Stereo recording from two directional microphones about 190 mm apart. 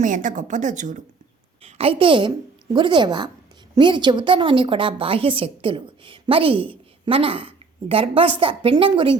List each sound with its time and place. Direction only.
0.0 s a woman's voice: 40° right (ahead or behind)
1.6 s a woman's voice: 30° right (ahead or behind)